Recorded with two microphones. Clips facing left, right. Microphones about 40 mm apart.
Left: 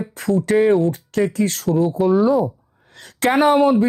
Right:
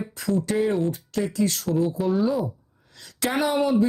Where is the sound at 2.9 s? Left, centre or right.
Left.